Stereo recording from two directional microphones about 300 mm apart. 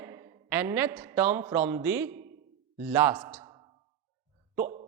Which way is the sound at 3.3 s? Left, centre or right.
Centre.